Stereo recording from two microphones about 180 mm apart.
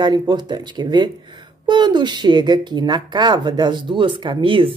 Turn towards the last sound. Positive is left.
turn(degrees=-30)  # may be behind; listen again after turning